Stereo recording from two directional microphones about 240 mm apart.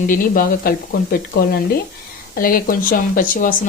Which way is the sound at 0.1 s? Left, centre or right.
Left.